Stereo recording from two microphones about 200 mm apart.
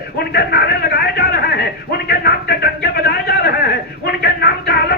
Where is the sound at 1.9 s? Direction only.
50° left (ahead or behind).